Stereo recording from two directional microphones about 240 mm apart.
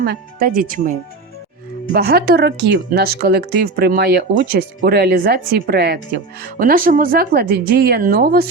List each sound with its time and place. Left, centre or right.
0.0 s speech: right